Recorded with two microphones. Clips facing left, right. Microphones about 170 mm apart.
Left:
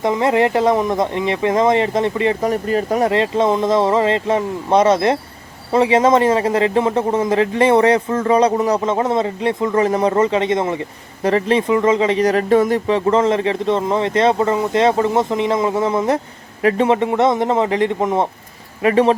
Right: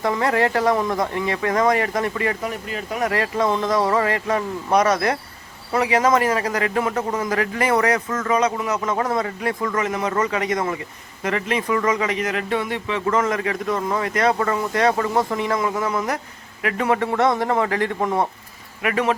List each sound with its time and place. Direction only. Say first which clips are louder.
0.0 s speech: left 4 dB; 20° left (ahead or behind)
2.4 s speech: left 10 dB; 40° left (ahead or behind)
3.1 s speech: left 5 dB; 25° left (ahead or behind); by 13.0 s 40° left (ahead or behind)
13.1 s speech: left 4 dB; 30° left (ahead or behind)